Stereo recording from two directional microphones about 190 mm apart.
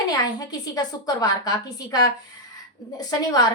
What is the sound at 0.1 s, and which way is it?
A woman's voice, 20° left (ahead or behind).